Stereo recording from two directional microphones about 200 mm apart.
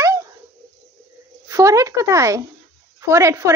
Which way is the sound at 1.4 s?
15° right (ahead or behind).